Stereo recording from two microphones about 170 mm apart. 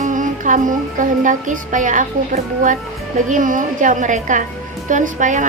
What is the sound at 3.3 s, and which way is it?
A woman's voice, 50° right (ahead or behind).